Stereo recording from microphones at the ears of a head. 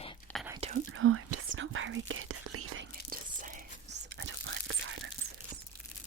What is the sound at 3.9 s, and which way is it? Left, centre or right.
Whispering, right.